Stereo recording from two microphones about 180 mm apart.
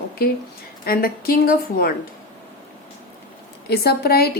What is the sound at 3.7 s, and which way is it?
Speech, 60° left (ahead or behind).